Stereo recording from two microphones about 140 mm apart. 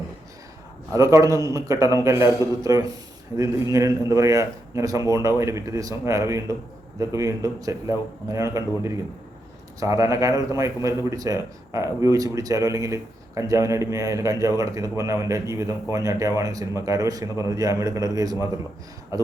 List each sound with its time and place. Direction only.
0.9 s speech: 25° right (ahead or behind)